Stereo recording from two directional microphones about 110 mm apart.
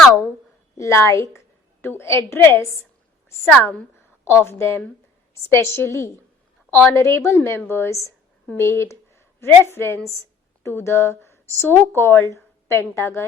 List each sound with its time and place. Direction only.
0.8 s a woman's voice: 25° left (ahead or behind)